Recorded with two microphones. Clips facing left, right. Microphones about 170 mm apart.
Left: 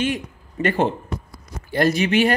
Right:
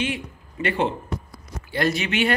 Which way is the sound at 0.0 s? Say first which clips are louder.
Left 4 dB; 45° left (ahead or behind).